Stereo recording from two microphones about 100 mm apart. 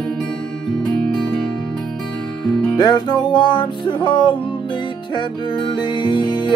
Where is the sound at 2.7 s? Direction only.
45° left (ahead or behind).